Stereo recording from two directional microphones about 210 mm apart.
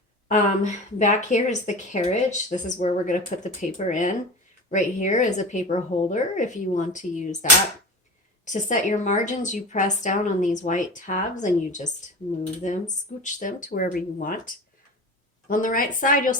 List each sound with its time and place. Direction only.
0.3 s speech: 35° left (ahead or behind)
8.4 s speech: 35° left (ahead or behind)